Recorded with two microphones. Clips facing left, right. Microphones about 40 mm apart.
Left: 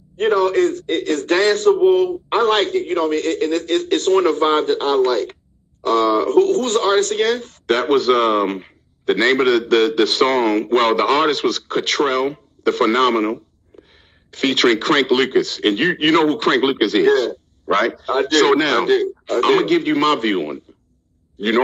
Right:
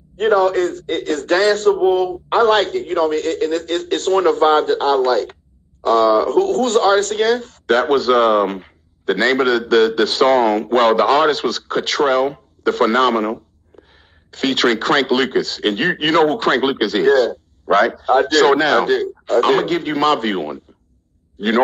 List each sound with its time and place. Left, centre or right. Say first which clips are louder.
0.2 s a man's voice: right 1 dB; left